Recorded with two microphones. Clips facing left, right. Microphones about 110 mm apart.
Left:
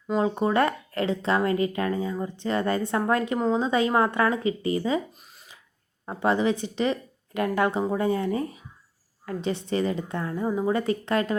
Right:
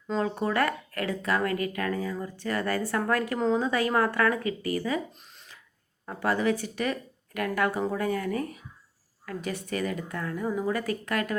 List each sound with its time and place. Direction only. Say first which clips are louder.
0.1 s speech: left 4 dB; 20° left (ahead or behind)
6.1 s speech: left 3 dB; 20° left (ahead or behind)